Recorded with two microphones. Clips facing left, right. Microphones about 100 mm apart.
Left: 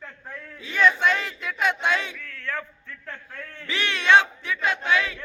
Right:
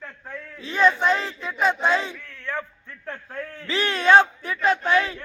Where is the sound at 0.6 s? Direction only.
35° right (ahead or behind).